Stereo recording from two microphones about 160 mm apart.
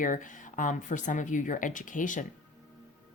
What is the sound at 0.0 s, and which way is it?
Speech, 55° left (ahead or behind).